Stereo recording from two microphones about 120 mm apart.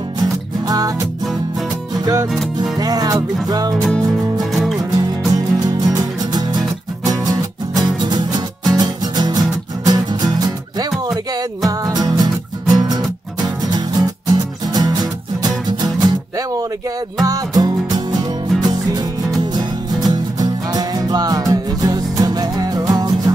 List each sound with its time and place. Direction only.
0.2 s music: 30° right (ahead or behind)
4.4 s music: centre (ahead or behind)
4.7 s music: 35° right (ahead or behind)